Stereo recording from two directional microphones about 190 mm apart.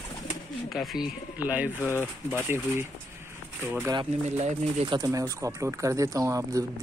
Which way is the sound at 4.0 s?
35° right (ahead or behind).